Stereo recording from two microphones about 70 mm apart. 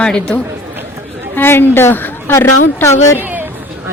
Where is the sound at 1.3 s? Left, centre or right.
Left.